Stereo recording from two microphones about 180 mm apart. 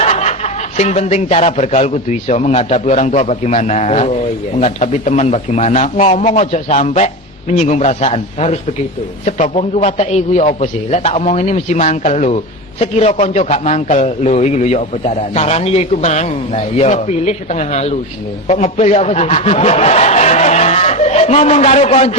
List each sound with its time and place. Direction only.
0.0 s a man's voice: 35° left (ahead or behind)